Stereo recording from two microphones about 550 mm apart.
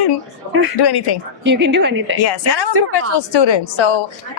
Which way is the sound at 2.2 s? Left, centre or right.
Left.